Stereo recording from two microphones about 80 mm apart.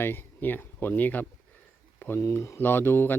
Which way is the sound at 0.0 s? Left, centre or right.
Left.